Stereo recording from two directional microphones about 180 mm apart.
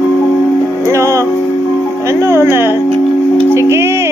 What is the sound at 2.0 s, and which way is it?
Speech, 15° right (ahead or behind).